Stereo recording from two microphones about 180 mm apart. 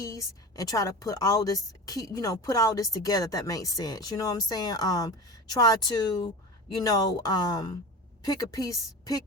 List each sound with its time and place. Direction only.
0.0 s a woman's voice: 15° left (ahead or behind)